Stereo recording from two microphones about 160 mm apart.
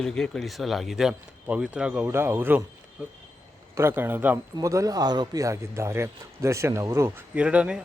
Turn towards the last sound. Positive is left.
turn(degrees=-5)  # may be behind; listen again after turning